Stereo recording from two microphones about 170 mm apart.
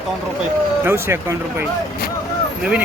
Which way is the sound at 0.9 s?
15° right (ahead or behind).